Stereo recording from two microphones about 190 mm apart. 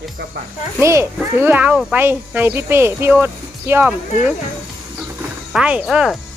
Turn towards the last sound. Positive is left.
turn(degrees=-5)  # may be behind; listen again after turning